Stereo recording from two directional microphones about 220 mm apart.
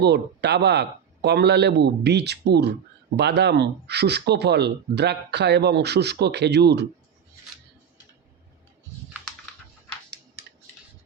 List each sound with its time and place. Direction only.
0.0 s speech: 50° right (ahead or behind)